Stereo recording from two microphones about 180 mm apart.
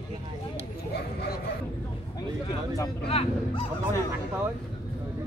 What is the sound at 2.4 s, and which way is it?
Speech, 20° left (ahead or behind).